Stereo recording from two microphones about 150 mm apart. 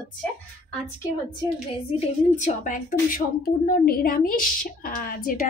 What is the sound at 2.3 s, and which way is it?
A woman's voice, 55° left (ahead or behind).